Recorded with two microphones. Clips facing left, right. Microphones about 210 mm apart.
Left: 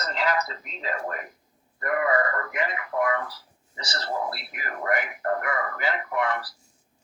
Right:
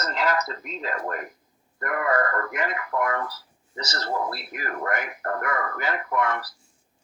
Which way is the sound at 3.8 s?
45° right (ahead or behind).